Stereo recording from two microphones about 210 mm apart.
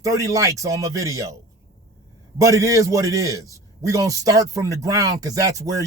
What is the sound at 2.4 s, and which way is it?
A man's voice, 15° right (ahead or behind).